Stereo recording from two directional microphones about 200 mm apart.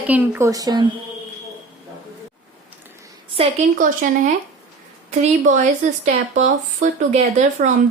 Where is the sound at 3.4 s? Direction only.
30° right (ahead or behind).